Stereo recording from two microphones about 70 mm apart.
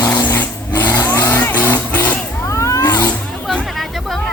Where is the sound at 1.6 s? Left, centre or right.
Left.